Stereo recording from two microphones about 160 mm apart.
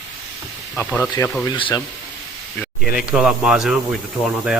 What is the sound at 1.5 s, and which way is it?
Speech, 30° left (ahead or behind).